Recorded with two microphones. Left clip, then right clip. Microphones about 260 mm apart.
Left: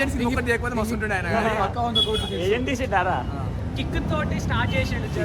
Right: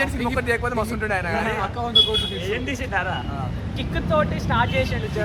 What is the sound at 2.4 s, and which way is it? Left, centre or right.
Speech, left.